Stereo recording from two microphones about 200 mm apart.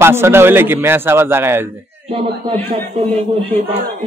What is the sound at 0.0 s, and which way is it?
A man's voice, 10° right (ahead or behind).